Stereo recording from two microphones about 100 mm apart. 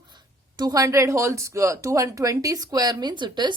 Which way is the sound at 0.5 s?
40° right (ahead or behind).